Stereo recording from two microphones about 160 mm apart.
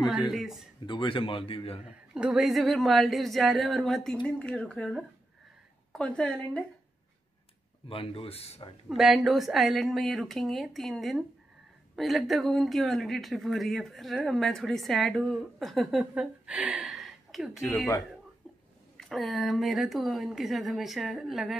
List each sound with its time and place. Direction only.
0.0 s speech: centre (ahead or behind)
0.8 s a man's voice: 30° left (ahead or behind)
2.1 s speech: 5° right (ahead or behind)
7.9 s a man's voice: 35° left (ahead or behind)
8.8 s speech: centre (ahead or behind)
18.9 s speech: centre (ahead or behind)